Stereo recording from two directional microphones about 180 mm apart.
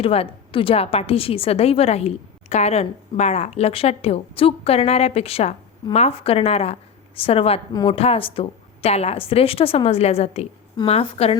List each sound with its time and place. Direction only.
0.0 s a woman's voice: 30° left (ahead or behind)
7.7 s speech: 20° left (ahead or behind)
7.9 s a woman's voice: 35° left (ahead or behind)